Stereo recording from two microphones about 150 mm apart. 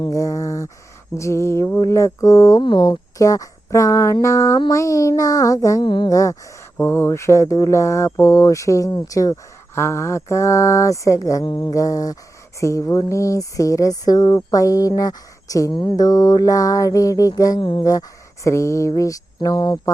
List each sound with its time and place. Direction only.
0.0 s speech: 25° left (ahead or behind)